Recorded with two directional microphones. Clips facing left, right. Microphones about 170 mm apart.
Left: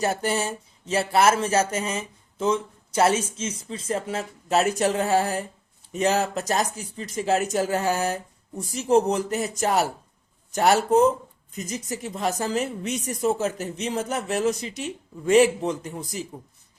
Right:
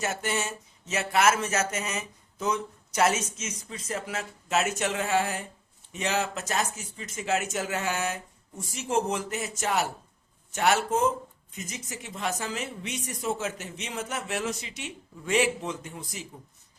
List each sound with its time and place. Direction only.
0.0 s a woman's voice: 35° left (ahead or behind)